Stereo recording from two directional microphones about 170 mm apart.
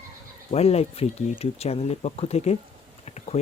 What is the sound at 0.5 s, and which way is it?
Speech, 35° left (ahead or behind).